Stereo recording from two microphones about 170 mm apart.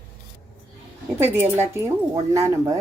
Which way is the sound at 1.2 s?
15° right (ahead or behind).